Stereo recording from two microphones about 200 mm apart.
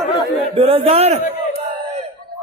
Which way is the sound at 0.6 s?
30° right (ahead or behind).